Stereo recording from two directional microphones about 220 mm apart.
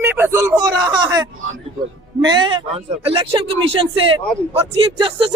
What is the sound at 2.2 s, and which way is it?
Speech, 25° right (ahead or behind).